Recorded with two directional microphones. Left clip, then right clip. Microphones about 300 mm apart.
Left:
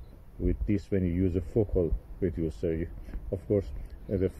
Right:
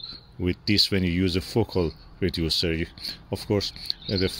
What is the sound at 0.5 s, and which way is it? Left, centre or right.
Speech, right.